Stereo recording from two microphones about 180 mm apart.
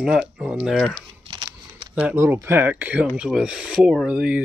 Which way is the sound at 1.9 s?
10° right (ahead or behind).